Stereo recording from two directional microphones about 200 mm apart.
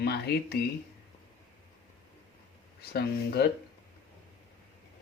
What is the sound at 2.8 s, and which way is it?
Speech, 50° left (ahead or behind).